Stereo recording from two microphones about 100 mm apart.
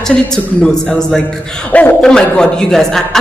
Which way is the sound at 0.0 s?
5° left (ahead or behind).